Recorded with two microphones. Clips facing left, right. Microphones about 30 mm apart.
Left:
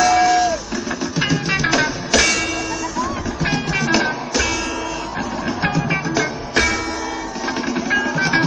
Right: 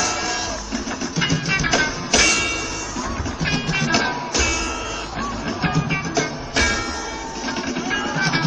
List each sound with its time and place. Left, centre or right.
0.0 s music: centre
1.5 s music: left
1.8 s music: centre
3.5 s music: centre
3.9 s music: centre
5.6 s music: centre
7.9 s music: centre